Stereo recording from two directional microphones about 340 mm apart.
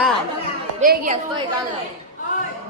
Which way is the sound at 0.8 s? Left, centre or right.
Right.